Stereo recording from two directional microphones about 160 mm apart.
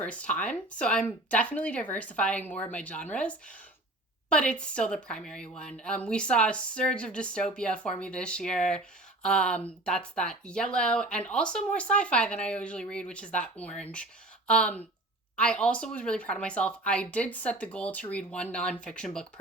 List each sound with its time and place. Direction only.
0.0 s speech: 10° left (ahead or behind)